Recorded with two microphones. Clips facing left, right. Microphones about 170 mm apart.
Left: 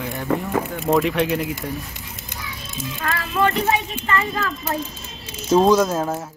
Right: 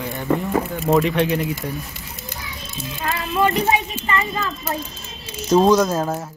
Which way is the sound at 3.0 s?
15° right (ahead or behind).